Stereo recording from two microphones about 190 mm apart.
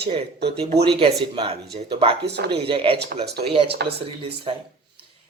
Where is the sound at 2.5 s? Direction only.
30° right (ahead or behind).